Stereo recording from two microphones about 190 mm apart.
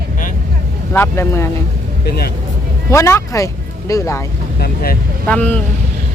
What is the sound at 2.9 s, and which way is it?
Speech, 15° left (ahead or behind).